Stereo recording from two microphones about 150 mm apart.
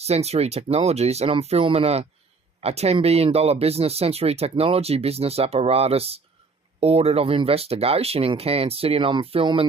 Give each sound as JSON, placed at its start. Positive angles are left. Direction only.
{"t": 0.0, "sound": "speech", "side_deg": -45}